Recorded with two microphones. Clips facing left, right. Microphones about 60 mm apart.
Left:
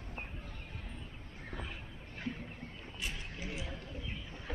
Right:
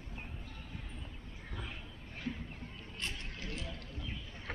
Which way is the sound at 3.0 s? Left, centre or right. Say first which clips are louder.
Even; centre.